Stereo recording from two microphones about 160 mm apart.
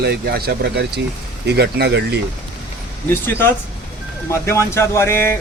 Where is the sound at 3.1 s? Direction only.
15° left (ahead or behind).